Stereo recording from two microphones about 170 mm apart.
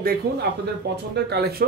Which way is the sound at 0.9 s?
75° right (ahead or behind).